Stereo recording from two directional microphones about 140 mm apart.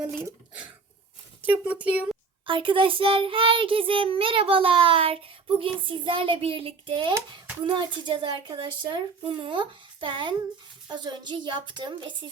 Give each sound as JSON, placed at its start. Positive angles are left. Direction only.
{"t": 0.2, "sound": "speech", "side_deg": -15}
{"t": 2.5, "sound": "child singing", "side_deg": -40}